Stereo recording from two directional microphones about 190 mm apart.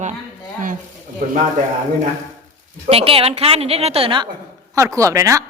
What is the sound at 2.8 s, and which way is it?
A woman's voice, 30° right (ahead or behind).